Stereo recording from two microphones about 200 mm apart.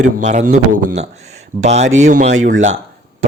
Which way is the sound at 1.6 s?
35° right (ahead or behind).